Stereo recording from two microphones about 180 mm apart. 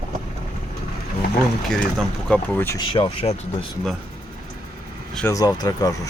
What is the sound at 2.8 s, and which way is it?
Speech, 30° left (ahead or behind).